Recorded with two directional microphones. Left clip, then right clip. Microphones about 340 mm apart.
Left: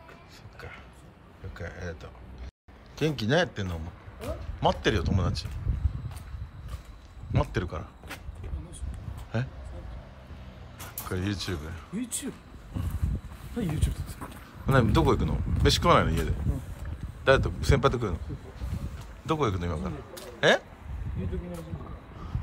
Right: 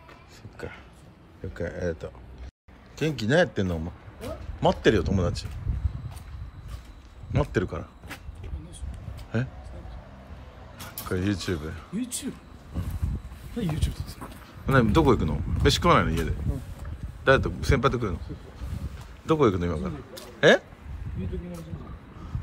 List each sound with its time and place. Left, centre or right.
1.5 s a man's voice: centre
7.3 s speech: centre
9.4 s a man's voice: centre
10.8 s speech: centre
13.6 s a man's voice: centre
19.2 s a man's voice: centre